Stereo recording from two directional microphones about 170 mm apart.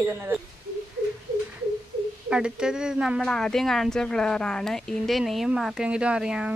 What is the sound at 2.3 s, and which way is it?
A woman's voice, 5° right (ahead or behind).